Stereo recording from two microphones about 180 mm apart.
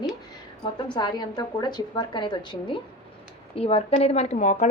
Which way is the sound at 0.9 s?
25° left (ahead or behind).